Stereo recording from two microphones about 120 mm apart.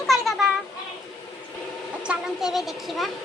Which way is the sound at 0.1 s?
Centre (ahead or behind).